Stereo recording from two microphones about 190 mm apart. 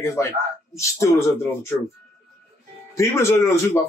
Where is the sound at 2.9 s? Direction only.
15° left (ahead or behind).